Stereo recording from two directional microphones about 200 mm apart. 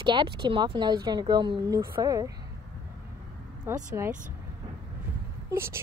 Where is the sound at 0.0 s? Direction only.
25° right (ahead or behind).